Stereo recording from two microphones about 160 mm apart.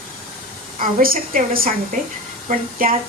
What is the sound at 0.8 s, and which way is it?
A woman's voice, 60° right (ahead or behind).